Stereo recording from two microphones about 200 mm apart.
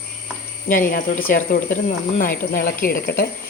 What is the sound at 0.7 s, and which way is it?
Speech, 45° left (ahead or behind).